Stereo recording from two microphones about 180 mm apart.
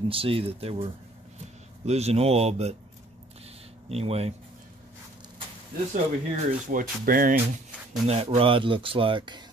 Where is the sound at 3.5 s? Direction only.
35° right (ahead or behind).